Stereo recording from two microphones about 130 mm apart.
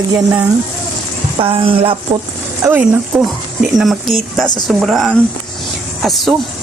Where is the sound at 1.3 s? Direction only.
45° right (ahead or behind).